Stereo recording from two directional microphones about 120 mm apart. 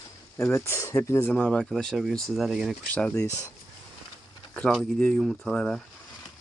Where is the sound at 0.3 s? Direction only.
20° left (ahead or behind).